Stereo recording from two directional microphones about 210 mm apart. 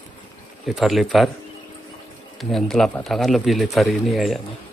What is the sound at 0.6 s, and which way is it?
Speech, centre (ahead or behind).